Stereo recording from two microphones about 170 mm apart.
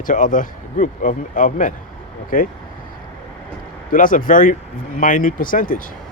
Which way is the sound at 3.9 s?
55° left (ahead or behind).